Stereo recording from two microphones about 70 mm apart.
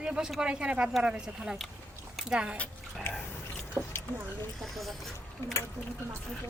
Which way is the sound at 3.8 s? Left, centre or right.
Right.